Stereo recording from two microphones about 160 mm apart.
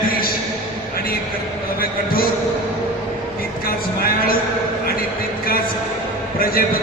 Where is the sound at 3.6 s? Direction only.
65° left (ahead or behind).